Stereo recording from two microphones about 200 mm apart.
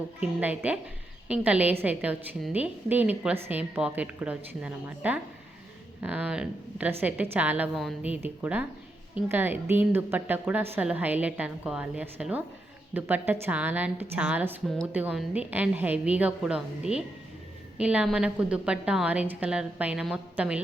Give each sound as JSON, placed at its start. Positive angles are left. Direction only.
{"t": 0.2, "sound": "a woman's voice", "side_deg": -5}